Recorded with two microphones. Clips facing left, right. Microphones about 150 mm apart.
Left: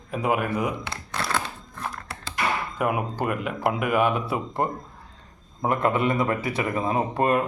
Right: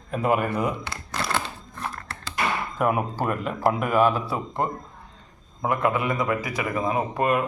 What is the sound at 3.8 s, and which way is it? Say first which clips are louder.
Speech: even; 40° right (ahead or behind).